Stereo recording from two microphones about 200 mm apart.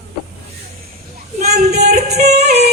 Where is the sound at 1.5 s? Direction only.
50° right (ahead or behind).